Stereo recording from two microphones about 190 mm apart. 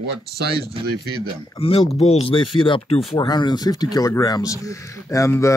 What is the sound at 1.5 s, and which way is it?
Speech, 30° left (ahead or behind).